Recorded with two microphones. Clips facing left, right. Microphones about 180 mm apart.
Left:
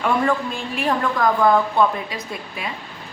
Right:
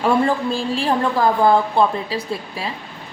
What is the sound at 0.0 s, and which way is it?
A woman's voice, 30° right (ahead or behind).